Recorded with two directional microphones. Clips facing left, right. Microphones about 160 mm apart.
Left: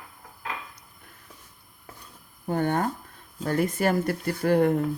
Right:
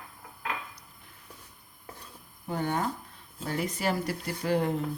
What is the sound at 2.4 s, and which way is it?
Speech, 55° left (ahead or behind).